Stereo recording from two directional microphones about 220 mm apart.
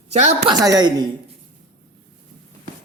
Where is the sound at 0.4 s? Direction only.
15° right (ahead or behind).